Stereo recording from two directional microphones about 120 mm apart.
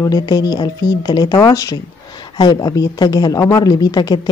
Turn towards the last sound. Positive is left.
turn(degrees=35)  # may be behind; listen again after turning